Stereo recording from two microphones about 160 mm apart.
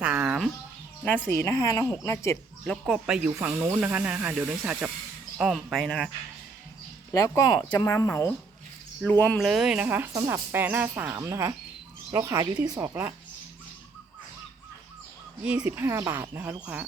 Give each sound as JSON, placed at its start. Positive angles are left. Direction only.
{"t": 0.0, "sound": "a sound", "side_deg": -5}
{"t": 1.0, "sound": "a woman's voice", "side_deg": 10}
{"t": 2.6, "sound": "speech", "side_deg": 0}
{"t": 7.1, "sound": "a woman's voice", "side_deg": 20}
{"t": 9.4, "sound": "speech", "side_deg": 0}
{"t": 15.4, "sound": "speech", "side_deg": -10}